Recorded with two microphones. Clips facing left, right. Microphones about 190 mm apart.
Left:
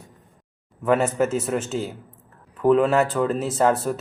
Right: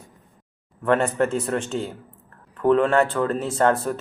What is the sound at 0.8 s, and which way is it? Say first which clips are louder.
A woman's voice: even; 5° left (ahead or behind).